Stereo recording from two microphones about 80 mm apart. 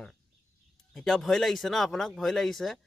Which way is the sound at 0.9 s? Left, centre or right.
Centre.